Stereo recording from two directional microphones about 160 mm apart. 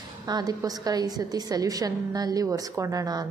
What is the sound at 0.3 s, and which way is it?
A woman's voice, 25° right (ahead or behind).